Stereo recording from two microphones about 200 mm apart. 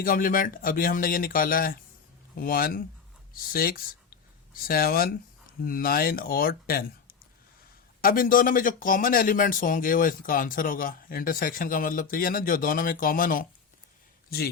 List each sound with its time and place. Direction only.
0.0 s speech: 45° left (ahead or behind)